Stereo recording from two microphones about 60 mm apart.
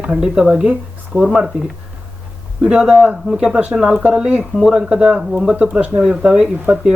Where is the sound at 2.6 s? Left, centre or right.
Centre.